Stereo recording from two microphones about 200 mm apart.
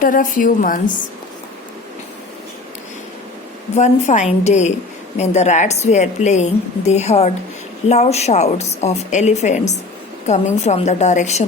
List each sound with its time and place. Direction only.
0.0 s a woman's voice: 40° left (ahead or behind)
3.8 s a woman's voice: 35° left (ahead or behind)